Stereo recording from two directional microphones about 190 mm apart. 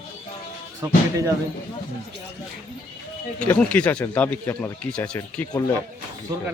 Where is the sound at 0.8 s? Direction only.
15° right (ahead or behind).